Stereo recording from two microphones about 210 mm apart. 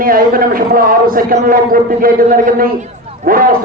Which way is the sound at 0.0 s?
45° right (ahead or behind).